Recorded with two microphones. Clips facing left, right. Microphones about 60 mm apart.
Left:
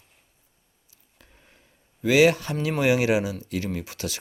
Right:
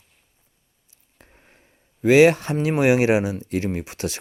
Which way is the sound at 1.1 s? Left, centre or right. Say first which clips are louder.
Right 3 dB; right.